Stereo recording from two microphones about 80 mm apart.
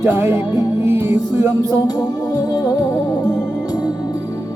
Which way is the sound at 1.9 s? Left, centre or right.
Left.